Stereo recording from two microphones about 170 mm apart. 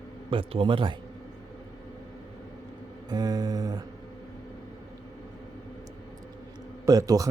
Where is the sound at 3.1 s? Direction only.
25° right (ahead or behind).